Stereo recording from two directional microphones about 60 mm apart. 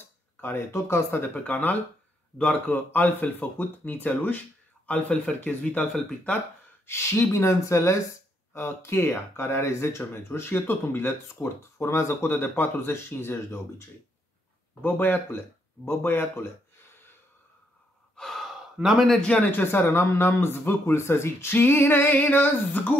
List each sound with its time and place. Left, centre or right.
0.4 s speech: left
1.3 s speech: left
5.9 s speech: centre
6.9 s speech: left
8.5 s speech: left
14.8 s speech: left
18.1 s gasp: centre
18.8 s speech: centre
19.0 s speech: centre
19.3 s speech: left
19.6 s speech: left
22.0 s speech: left